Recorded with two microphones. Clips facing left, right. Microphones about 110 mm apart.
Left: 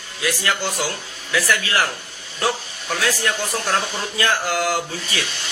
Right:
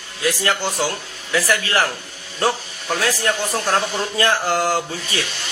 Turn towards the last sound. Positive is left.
turn(degrees=-30)  # may be behind; listen again after turning